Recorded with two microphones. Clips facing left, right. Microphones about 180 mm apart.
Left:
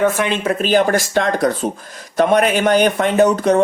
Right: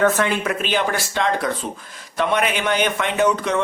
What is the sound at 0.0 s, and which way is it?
Speech, 15° left (ahead or behind).